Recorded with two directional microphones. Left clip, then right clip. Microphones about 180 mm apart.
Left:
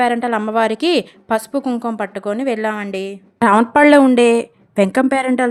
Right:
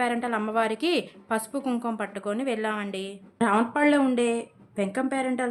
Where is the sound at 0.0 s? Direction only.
45° left (ahead or behind).